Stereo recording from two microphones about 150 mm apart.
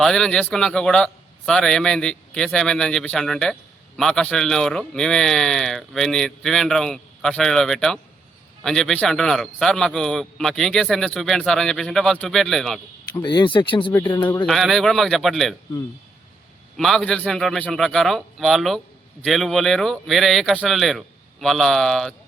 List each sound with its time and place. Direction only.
0.0 s a man's voice: 5° left (ahead or behind)
13.2 s speech: 30° left (ahead or behind)
14.4 s a man's voice: centre (ahead or behind)
16.7 s a man's voice: centre (ahead or behind)